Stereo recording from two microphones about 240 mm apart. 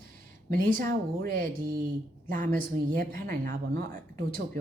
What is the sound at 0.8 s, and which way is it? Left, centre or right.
Speech, right.